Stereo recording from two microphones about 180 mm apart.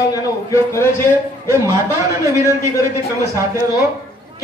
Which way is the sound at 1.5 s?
20° right (ahead or behind).